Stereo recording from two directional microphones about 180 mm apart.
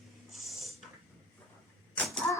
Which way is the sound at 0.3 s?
Centre (ahead or behind).